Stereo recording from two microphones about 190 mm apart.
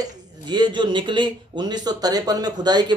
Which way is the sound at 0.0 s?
20° right (ahead or behind).